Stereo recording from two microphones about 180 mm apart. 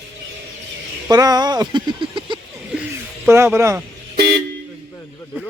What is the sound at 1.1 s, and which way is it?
Speech, 20° right (ahead or behind).